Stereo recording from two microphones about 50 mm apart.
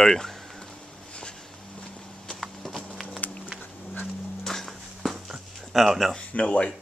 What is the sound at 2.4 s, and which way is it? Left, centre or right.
Clip-clop, centre.